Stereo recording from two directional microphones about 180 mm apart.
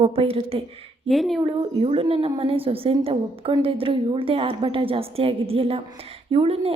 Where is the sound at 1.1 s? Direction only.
Centre (ahead or behind).